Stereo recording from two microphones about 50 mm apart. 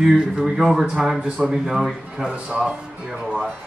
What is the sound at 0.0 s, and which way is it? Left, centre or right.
Speech, centre.